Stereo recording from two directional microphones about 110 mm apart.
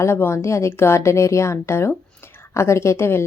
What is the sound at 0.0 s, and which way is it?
A woman's voice, 25° left (ahead or behind).